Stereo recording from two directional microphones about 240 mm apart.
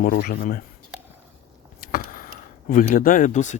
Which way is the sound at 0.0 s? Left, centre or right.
Left.